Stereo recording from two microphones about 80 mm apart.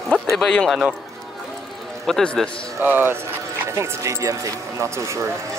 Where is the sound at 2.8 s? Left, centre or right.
Right.